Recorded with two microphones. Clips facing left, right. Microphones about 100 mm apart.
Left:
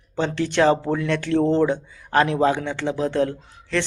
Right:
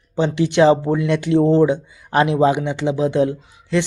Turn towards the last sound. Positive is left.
turn(degrees=-15)  # may be behind; listen again after turning